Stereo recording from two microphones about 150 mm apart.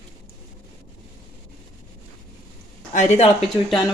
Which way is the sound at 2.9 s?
50° left (ahead or behind).